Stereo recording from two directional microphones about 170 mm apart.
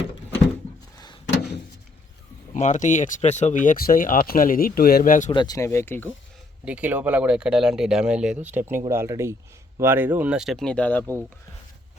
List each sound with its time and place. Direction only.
2.5 s speech: 45° left (ahead or behind)
5.3 s speech: 25° left (ahead or behind)
6.7 s speech: 10° right (ahead or behind); by 11.0 s 10° left (ahead or behind)
11.0 s speech: 15° right (ahead or behind)